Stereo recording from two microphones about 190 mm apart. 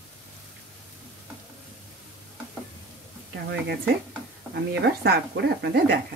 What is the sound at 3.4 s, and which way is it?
Speech, 60° right (ahead or behind).